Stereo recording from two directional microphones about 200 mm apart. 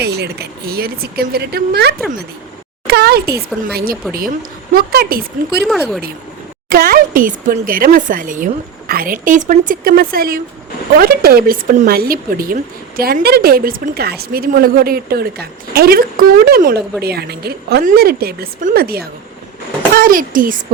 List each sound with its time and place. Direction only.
0.0 s speech: 55° right (ahead or behind)
5.6 s speech: centre (ahead or behind)
6.7 s speech: 50° right (ahead or behind)